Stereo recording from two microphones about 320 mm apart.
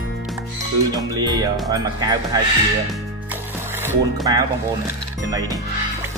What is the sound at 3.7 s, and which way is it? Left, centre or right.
Speech, centre.